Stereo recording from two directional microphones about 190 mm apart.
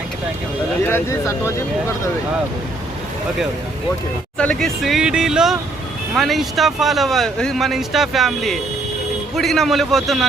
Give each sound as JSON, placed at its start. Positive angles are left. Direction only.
{"t": 0.9, "sound": "speech", "side_deg": 15}
{"t": 4.4, "sound": "speech", "side_deg": 5}